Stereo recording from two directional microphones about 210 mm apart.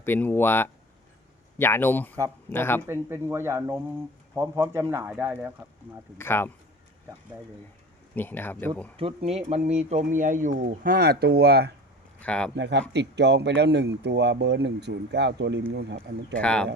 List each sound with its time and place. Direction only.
0.0 s speech: 10° left (ahead or behind)
2.8 s speech: 10° right (ahead or behind)
6.1 s speech: 10° left (ahead or behind)
8.1 s speech: 10° left (ahead or behind)
9.0 s speech: 30° right (ahead or behind); by 11.7 s 50° right (ahead or behind)
12.2 s speech: 5° left (ahead or behind)
12.5 s speech: 55° right (ahead or behind)
16.4 s speech: 5° left (ahead or behind)